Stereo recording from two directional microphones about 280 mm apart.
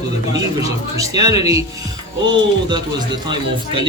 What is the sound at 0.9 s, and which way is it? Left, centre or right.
Speech, centre.